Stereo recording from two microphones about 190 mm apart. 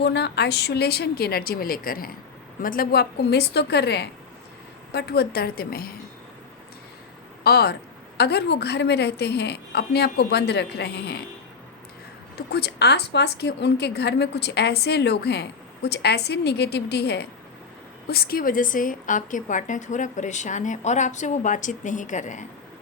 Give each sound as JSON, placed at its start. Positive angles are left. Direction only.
{"t": 0.0, "sound": "a woman's voice", "side_deg": 60}
{"t": 7.4, "sound": "a woman's voice", "side_deg": 60}
{"t": 12.5, "sound": "a woman's voice", "side_deg": 60}